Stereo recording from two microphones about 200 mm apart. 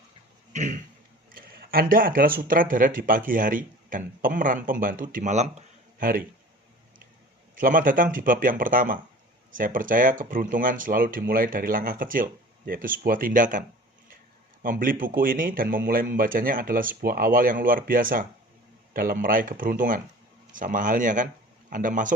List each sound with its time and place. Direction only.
0.5 s a sound: 40° right (ahead or behind)
1.3 s speech: 45° right (ahead or behind)
7.6 s speech: 45° right (ahead or behind)